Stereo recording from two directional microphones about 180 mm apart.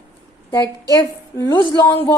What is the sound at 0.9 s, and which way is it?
A woman's voice, 20° left (ahead or behind).